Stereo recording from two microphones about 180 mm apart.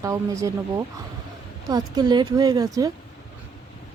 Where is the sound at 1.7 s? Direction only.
25° right (ahead or behind).